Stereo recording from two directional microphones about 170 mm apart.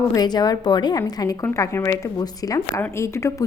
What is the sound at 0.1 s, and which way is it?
A woman's voice, 25° left (ahead or behind).